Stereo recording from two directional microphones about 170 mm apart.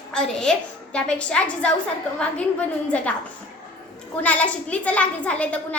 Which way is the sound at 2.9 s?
5° left (ahead or behind).